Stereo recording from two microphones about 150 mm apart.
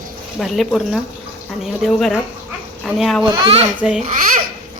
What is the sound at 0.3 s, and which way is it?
A woman's voice, centre (ahead or behind).